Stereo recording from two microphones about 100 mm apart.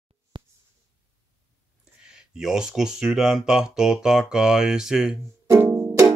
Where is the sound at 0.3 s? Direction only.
55° right (ahead or behind).